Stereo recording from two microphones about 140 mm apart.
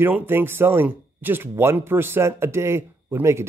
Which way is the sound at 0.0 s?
15° right (ahead or behind).